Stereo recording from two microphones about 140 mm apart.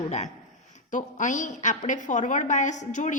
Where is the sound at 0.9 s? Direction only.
65° left (ahead or behind).